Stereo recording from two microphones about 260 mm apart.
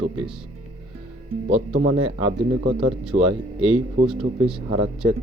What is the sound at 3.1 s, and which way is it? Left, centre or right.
Speech, right.